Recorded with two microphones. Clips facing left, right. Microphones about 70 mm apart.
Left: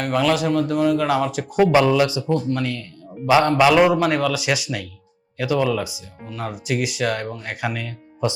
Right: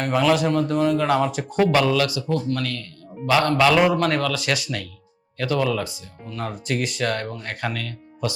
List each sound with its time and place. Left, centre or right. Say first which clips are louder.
0.0 s speech: even; centre
1.6 s speech: left 3 dB; centre